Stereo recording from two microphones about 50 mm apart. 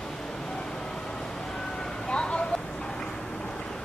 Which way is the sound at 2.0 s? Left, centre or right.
Centre.